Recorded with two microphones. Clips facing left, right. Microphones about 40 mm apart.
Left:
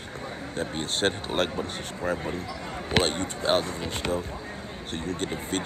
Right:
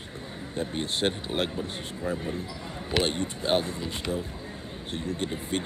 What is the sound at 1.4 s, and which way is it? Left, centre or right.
Speech, left.